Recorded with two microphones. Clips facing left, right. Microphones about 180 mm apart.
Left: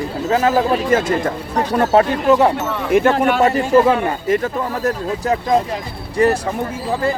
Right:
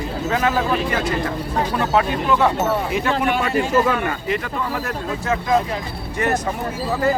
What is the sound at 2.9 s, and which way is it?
A man's voice, 55° left (ahead or behind).